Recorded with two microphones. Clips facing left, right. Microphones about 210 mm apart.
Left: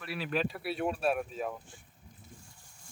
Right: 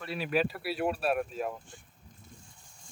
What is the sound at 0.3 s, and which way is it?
Speech, 5° right (ahead or behind).